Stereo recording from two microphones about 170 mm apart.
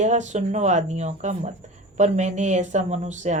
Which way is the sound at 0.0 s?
45° right (ahead or behind).